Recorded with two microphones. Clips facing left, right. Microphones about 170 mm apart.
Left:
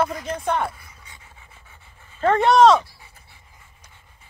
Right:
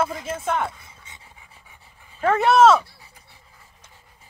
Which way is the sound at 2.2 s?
5° right (ahead or behind).